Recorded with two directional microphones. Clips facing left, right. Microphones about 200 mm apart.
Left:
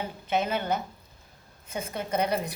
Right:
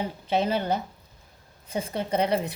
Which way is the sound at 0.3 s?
30° right (ahead or behind).